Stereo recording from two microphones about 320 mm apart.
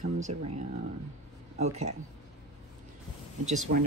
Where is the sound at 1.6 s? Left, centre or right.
Right.